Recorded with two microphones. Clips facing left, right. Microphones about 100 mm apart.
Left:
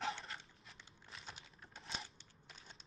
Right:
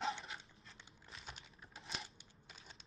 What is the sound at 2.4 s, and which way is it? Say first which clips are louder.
Crushing: even; centre (ahead or behind).